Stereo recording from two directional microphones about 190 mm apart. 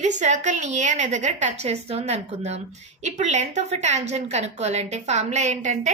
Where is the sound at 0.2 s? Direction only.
40° right (ahead or behind).